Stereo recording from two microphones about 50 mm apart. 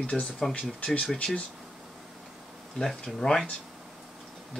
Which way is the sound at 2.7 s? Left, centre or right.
Centre.